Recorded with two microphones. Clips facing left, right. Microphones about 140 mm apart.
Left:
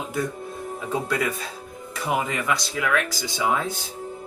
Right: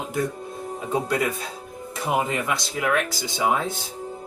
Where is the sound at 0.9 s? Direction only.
20° right (ahead or behind).